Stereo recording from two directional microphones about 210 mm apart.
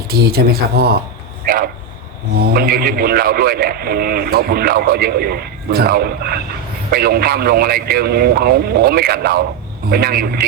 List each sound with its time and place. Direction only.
0.1 s a man's voice: 50° right (ahead or behind)
2.4 s a man's voice: 45° right (ahead or behind)